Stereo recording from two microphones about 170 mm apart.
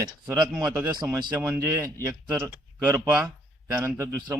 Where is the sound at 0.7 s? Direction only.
20° right (ahead or behind).